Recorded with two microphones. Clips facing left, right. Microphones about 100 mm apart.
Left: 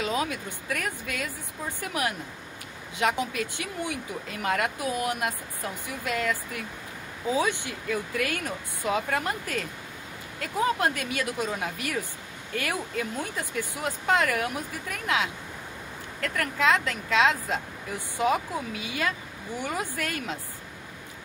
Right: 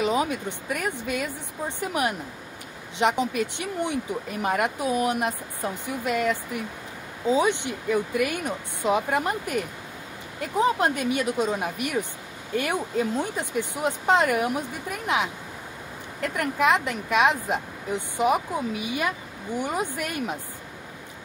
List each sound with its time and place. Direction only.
0.0 s speech: 20° right (ahead or behind)